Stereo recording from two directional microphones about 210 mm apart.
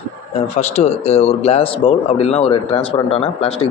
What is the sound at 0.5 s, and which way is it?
Speech, 30° left (ahead or behind).